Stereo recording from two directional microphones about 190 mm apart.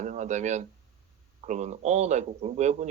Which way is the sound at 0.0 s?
40° right (ahead or behind).